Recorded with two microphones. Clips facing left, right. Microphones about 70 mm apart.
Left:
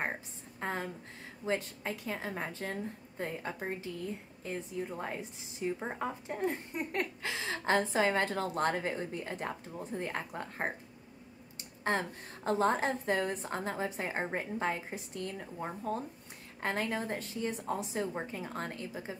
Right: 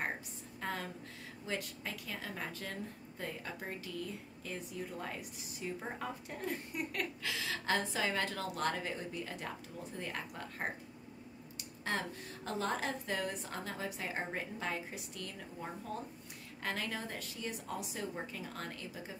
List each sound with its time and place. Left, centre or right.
0.6 s a woman's voice: left